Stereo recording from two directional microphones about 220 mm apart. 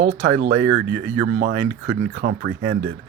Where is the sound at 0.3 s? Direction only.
60° right (ahead or behind).